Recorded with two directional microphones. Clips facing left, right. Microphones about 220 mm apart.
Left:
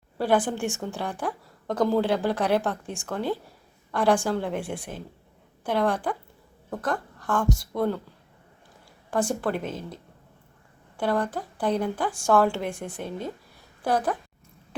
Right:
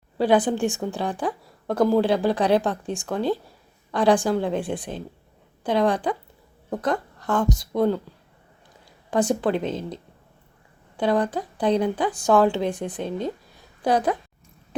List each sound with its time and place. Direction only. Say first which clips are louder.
0.2 s a woman's voice: right 4 dB; 20° right (ahead or behind)
9.0 s speech: right 4 dB; 20° right (ahead or behind)
10.9 s speech: right 4 dB; 20° right (ahead or behind)